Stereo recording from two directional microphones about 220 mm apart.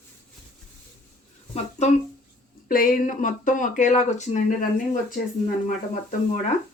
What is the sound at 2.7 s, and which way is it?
Speech, 40° left (ahead or behind).